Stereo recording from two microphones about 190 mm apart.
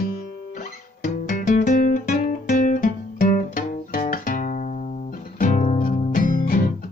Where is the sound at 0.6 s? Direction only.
40° left (ahead or behind).